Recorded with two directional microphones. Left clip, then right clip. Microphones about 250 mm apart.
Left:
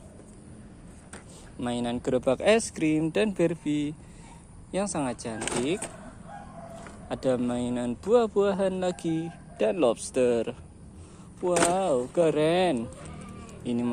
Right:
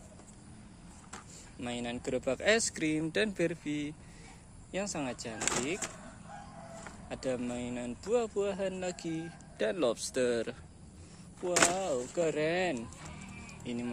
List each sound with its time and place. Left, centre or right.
1.6 s speech: centre
7.1 s speech: centre
11.7 s speech: left
13.5 s a sound: left